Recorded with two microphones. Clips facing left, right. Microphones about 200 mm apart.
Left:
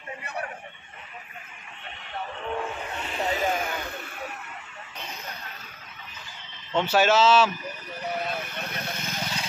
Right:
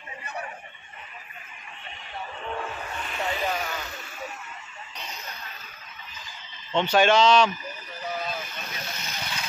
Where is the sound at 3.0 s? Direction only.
30° left (ahead or behind).